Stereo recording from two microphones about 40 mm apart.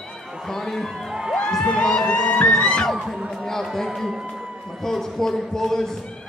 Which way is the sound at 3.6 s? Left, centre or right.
Centre.